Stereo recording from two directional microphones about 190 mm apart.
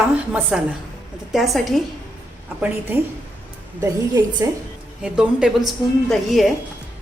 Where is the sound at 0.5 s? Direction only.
5° right (ahead or behind).